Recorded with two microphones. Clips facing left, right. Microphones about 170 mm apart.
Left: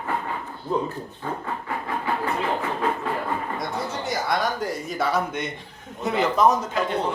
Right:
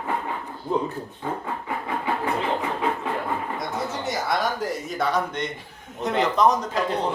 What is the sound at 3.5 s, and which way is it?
A man's voice, centre (ahead or behind).